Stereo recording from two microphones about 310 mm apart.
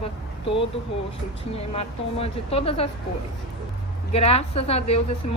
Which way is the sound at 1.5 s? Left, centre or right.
Centre.